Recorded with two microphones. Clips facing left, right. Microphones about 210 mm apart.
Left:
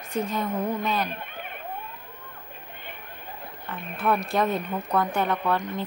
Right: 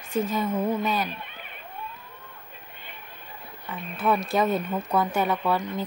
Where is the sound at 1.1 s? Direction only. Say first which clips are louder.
Left 3 dB; 50° left (ahead or behind).